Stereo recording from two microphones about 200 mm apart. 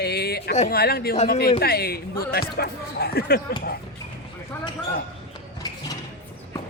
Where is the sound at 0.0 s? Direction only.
50° left (ahead or behind).